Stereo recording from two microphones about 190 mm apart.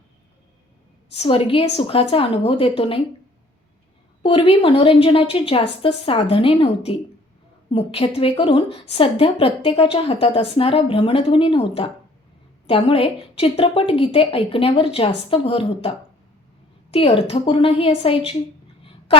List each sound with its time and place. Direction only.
1.1 s a woman's voice: 30° left (ahead or behind)
4.2 s a woman's voice: 30° left (ahead or behind)